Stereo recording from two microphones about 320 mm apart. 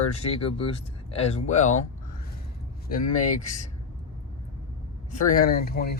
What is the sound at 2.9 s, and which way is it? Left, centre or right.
Speech, left.